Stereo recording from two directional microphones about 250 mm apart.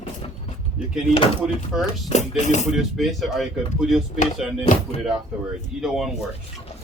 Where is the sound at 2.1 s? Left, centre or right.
Left.